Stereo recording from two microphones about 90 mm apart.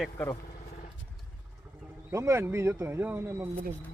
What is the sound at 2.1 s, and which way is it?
Speech, 30° right (ahead or behind).